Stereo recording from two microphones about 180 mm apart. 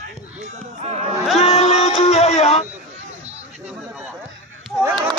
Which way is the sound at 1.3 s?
35° left (ahead or behind).